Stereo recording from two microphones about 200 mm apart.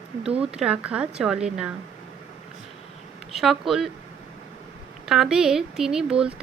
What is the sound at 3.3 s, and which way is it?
Speech, centre (ahead or behind).